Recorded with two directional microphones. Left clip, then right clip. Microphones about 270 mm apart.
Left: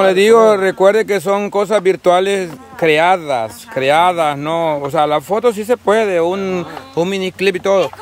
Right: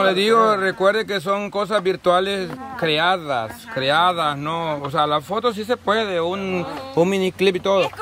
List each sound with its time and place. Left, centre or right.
0.0 s speech: centre
7.0 s speech: centre